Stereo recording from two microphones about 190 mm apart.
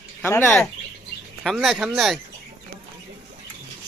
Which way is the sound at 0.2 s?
10° left (ahead or behind).